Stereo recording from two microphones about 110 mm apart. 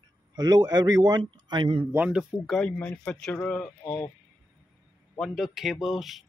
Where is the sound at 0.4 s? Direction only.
35° right (ahead or behind).